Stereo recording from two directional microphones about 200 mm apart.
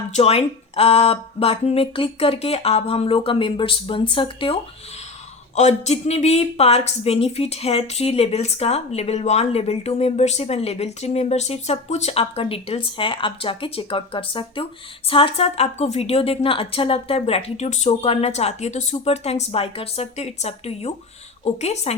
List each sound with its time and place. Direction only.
0.1 s speech: 30° left (ahead or behind)
5.5 s speech: 35° left (ahead or behind)